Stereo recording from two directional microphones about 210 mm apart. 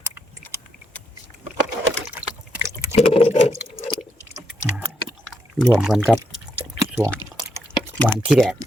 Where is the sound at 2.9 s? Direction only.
30° left (ahead or behind).